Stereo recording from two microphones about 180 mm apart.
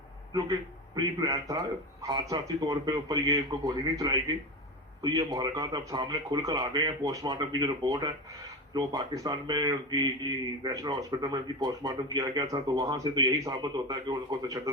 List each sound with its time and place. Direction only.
0.9 s a man's voice: 20° right (ahead or behind)